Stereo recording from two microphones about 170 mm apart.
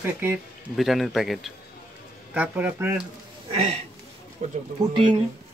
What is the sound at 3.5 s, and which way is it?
Speech, 40° right (ahead or behind).